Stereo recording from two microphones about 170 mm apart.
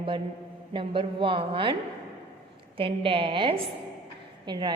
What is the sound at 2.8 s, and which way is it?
A woman's voice, 30° right (ahead or behind).